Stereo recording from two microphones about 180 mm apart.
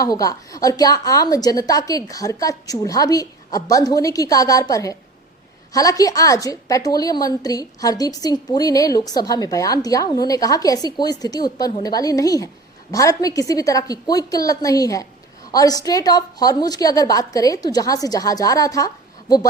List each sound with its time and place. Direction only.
0.0 s a woman's voice: 20° left (ahead or behind)